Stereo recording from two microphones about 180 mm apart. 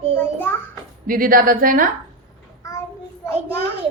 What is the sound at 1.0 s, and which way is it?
Speech, 50° right (ahead or behind).